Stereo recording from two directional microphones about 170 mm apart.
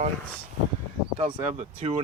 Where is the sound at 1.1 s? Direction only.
40° right (ahead or behind).